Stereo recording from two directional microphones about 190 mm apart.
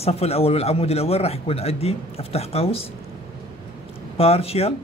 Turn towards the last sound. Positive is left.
turn(degrees=30)  # may be behind; listen again after turning